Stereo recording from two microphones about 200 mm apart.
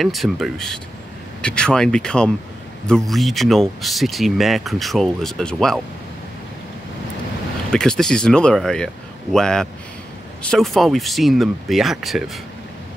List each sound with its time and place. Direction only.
0.0 s speech: centre (ahead or behind)
7.7 s speech: 5° left (ahead or behind)